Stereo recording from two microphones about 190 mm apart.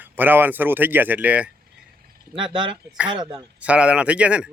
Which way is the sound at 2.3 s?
25° right (ahead or behind).